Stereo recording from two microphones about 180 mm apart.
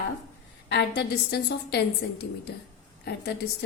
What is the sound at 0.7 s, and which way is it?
A woman's voice, 70° left (ahead or behind).